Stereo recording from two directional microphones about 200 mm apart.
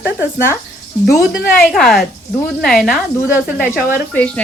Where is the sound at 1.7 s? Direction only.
Centre (ahead or behind).